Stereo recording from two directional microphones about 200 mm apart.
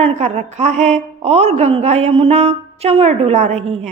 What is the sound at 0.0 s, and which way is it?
A woman's voice, 35° right (ahead or behind).